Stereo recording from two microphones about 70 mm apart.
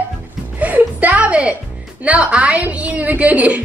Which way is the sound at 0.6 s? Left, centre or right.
Right.